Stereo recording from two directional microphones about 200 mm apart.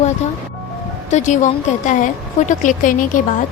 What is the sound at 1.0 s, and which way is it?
Speech, 35° left (ahead or behind).